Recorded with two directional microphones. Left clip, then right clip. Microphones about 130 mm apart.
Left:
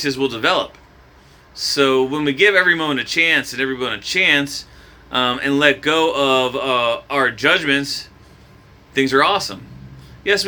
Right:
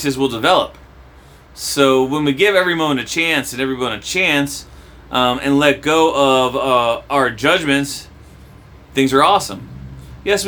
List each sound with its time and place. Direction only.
0.0 s speech: 20° right (ahead or behind)